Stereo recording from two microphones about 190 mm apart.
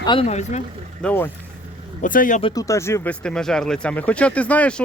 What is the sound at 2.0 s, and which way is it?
Speech, 45° left (ahead or behind).